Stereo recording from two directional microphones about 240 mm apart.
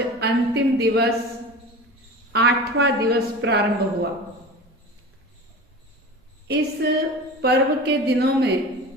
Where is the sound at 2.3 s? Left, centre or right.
Right.